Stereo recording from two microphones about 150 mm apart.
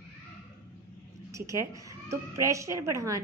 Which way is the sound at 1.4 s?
20° right (ahead or behind).